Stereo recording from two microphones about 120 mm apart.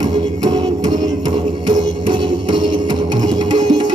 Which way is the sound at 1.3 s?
35° right (ahead or behind).